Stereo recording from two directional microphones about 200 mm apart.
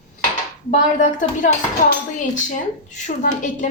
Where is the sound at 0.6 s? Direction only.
40° left (ahead or behind).